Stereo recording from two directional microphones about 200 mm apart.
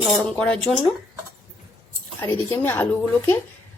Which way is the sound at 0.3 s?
5° left (ahead or behind).